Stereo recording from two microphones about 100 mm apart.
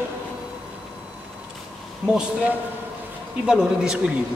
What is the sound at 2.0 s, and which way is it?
A man's voice, 10° right (ahead or behind).